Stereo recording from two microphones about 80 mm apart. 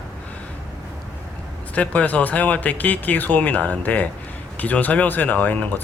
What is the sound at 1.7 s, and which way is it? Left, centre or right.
Speech, centre.